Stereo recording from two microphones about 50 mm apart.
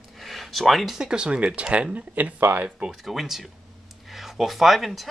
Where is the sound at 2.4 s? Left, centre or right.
Right.